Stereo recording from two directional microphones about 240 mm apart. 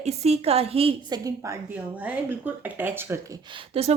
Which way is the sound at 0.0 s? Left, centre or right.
Right.